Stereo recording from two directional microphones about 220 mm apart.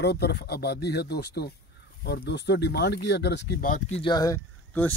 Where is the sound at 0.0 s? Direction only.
45° left (ahead or behind).